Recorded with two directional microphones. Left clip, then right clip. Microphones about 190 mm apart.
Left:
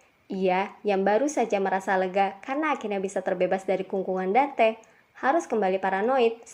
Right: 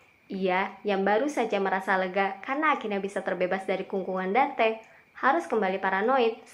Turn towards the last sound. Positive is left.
turn(degrees=40)  # may be behind; listen again after turning